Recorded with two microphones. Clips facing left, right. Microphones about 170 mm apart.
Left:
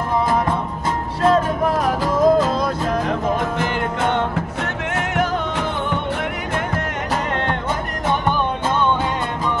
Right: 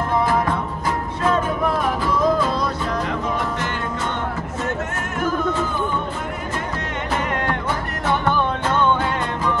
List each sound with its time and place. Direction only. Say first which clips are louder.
1.2 s music: left 4 dB; 35° left (ahead or behind)
4.0 s music: left 5 dB; 65° left (ahead or behind)